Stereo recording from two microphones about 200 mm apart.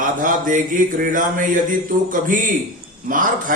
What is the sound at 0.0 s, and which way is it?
A man's voice, 40° right (ahead or behind).